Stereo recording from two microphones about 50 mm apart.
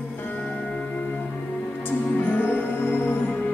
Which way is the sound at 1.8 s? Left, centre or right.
Left.